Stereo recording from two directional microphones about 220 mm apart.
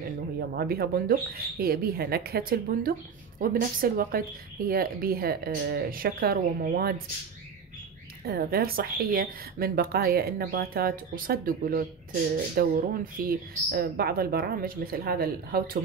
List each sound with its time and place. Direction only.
0.6 s speech: 45° right (ahead or behind)
8.3 s speech: 45° right (ahead or behind)